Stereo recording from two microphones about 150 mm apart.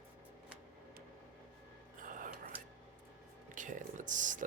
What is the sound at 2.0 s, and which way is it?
Whispering, 60° right (ahead or behind).